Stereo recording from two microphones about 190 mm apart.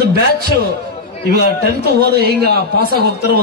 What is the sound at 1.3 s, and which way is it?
A man's voice, 55° right (ahead or behind).